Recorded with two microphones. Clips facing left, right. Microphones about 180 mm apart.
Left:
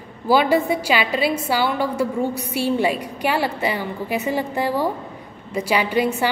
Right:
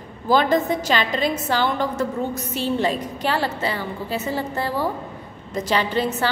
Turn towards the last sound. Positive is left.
turn(degrees=10)  # may be behind; listen again after turning